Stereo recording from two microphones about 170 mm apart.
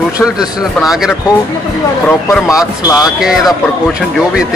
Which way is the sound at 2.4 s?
20° left (ahead or behind).